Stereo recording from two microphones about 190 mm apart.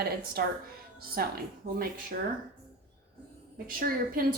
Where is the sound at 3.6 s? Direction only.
50° right (ahead or behind).